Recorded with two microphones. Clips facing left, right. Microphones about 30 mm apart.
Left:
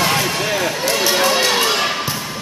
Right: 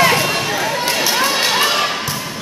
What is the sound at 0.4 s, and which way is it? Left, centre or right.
Run, centre.